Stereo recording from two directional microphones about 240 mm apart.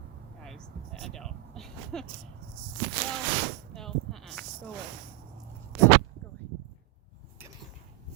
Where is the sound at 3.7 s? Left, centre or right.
Centre.